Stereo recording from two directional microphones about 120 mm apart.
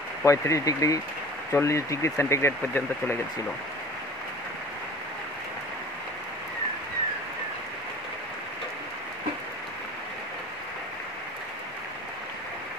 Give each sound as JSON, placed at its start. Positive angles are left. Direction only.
{"t": 0.2, "sound": "speech", "side_deg": 25}